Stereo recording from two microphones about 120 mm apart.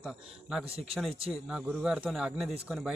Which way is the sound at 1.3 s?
10° right (ahead or behind).